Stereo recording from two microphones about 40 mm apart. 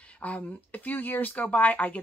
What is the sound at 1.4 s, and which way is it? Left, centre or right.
Speech, left.